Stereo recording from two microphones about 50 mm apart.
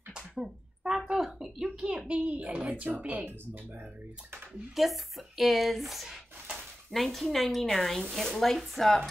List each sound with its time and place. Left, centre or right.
0.1 s a sound: centre
1.1 s speech: centre; by 3.3 s right
4.7 s speech: centre